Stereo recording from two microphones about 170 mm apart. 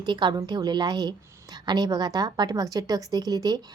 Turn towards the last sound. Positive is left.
turn(degrees=-25)  # may be behind; listen again after turning